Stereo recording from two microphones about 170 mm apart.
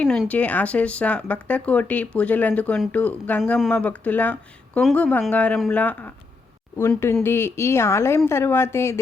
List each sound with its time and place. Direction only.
0.0 s speech: 5° left (ahead or behind)